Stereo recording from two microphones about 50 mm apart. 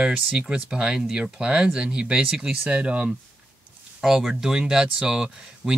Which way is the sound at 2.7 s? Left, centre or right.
Right.